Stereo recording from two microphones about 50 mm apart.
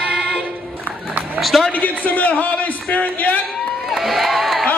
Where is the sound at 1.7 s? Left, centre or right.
Left.